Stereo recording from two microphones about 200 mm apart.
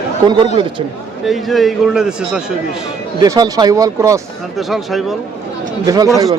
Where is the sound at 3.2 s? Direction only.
20° right (ahead or behind).